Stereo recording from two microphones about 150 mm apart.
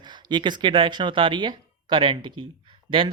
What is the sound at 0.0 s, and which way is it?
Speech, 30° right (ahead or behind).